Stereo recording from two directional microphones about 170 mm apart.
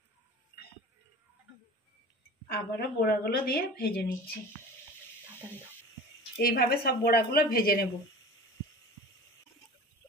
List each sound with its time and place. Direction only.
2.4 s a woman's voice: 70° left (ahead or behind)
6.4 s a woman's voice: 65° left (ahead or behind)